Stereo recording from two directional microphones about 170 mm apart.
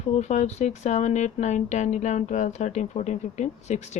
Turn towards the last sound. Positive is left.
turn(degrees=45)  # may be behind; listen again after turning